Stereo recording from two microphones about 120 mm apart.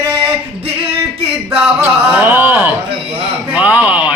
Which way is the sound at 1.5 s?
15° right (ahead or behind).